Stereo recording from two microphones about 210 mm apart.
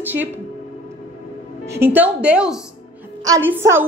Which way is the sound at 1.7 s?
10° right (ahead or behind).